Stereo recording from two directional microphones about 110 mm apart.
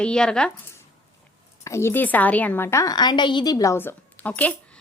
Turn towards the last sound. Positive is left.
turn(degrees=15)  # may be behind; listen again after turning